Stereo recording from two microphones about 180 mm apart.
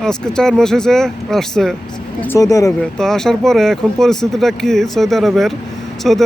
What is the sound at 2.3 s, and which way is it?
Speech, 20° left (ahead or behind).